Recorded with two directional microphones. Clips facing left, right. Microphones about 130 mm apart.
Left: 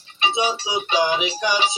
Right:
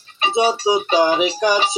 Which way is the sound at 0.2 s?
45° right (ahead or behind).